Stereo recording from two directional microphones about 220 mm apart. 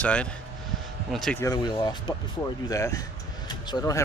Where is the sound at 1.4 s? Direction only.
15° left (ahead or behind).